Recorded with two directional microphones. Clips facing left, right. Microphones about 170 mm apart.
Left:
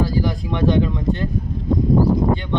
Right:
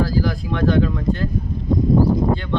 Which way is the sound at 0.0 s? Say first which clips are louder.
Even; 20° left (ahead or behind).